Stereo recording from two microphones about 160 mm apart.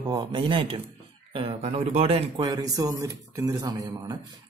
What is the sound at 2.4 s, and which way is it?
A man's voice, 25° right (ahead or behind).